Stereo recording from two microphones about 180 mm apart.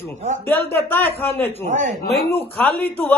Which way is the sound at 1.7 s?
45° right (ahead or behind).